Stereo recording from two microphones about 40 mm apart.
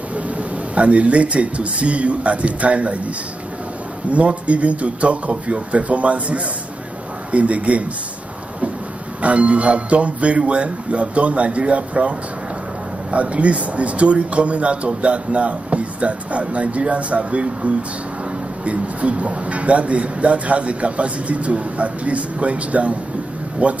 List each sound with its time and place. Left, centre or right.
0.1 s speech: right
4.1 s speech: right
9.2 s speech: right